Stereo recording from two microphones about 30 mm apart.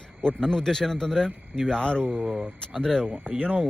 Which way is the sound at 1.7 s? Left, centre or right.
Left.